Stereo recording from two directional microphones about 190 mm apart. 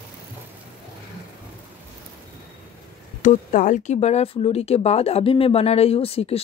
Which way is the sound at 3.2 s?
40° left (ahead or behind).